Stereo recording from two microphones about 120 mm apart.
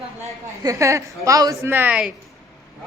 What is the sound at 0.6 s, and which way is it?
A woman's voice, 25° right (ahead or behind).